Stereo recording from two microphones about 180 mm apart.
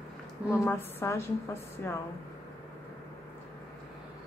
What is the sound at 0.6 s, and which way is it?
Speech, 15° left (ahead or behind).